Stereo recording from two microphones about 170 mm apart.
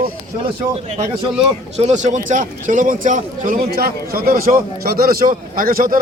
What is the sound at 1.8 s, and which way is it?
A man's voice, 45° right (ahead or behind).